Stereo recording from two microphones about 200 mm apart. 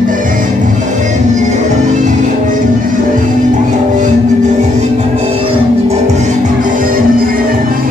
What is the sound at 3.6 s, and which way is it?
Music, 40° right (ahead or behind).